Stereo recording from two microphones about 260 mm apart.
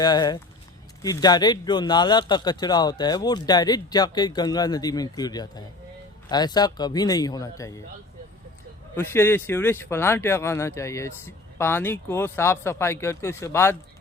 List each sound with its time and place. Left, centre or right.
0.0 s speech: centre
9.0 s speech: centre